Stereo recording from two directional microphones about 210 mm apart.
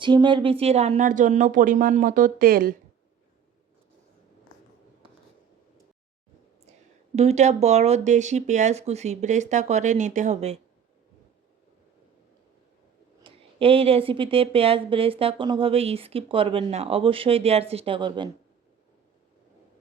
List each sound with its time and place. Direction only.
0.0 s speech: 20° right (ahead or behind); by 2.7 s 45° right (ahead or behind)
7.2 s speech: 30° right (ahead or behind)
13.2 s speech: 25° right (ahead or behind)